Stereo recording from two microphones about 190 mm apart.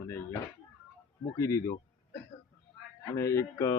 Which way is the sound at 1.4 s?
15° left (ahead or behind).